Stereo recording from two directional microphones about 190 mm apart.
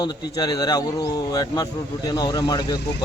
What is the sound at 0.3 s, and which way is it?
Speech, 20° left (ahead or behind).